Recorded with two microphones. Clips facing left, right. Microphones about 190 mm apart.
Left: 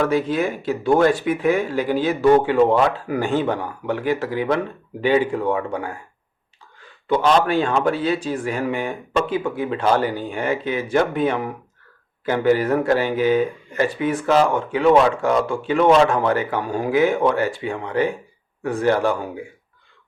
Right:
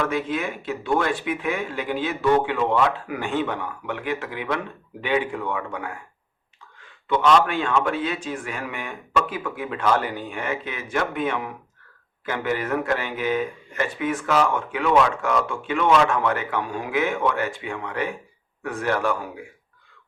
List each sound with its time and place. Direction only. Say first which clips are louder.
0.0 s speech: left 5 dB; 35° left (ahead or behind)
7.1 s speech: left 2 dB; 35° left (ahead or behind)